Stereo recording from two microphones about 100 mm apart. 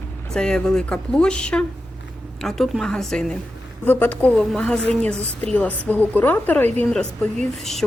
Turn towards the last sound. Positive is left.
turn(degrees=5)  # may be behind; listen again after turning